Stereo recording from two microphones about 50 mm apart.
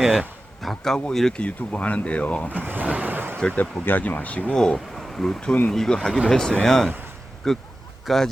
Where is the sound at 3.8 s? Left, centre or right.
Left.